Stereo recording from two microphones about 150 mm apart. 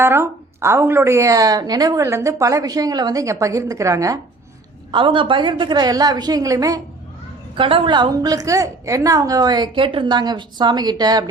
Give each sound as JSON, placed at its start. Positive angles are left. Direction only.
{"t": 0.0, "sound": "a woman's voice", "side_deg": -15}
{"t": 4.9, "sound": "a woman's voice", "side_deg": -35}
{"t": 7.5, "sound": "a woman's voice", "side_deg": -35}